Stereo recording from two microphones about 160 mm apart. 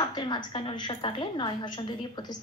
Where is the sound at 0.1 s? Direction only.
30° left (ahead or behind).